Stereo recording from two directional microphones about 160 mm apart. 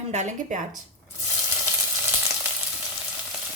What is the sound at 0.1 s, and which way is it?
Frying, 45° right (ahead or behind).